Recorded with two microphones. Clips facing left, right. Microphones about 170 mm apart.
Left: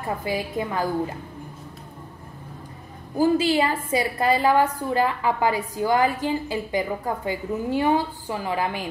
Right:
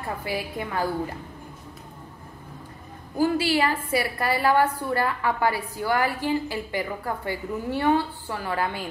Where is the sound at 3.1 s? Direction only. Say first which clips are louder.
Left 3 dB; 20° left (ahead or behind).